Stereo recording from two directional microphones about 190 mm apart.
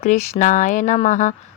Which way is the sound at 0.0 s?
40° left (ahead or behind).